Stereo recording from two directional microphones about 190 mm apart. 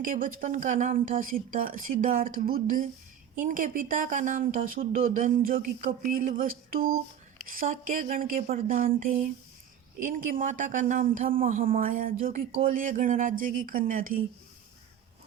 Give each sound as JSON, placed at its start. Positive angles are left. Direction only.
{"t": 0.0, "sound": "speech", "side_deg": -45}